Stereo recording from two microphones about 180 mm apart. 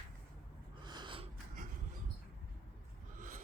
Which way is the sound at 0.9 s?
25° right (ahead or behind).